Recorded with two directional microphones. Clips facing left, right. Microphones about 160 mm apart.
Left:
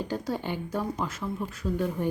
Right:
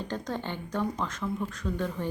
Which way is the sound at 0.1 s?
10° left (ahead or behind).